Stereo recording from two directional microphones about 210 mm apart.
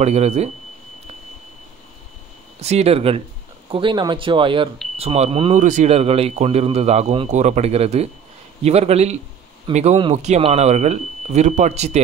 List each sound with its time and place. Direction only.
0.0 s speech: 30° right (ahead or behind)
2.6 s speech: 30° right (ahead or behind)